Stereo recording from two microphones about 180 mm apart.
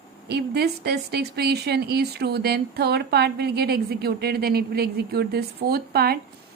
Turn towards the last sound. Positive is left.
turn(degrees=-60)  # may be behind; listen again after turning